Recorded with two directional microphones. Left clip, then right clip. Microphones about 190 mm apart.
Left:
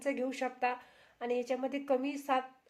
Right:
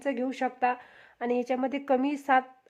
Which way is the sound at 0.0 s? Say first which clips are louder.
Right 5 dB; 35° right (ahead or behind).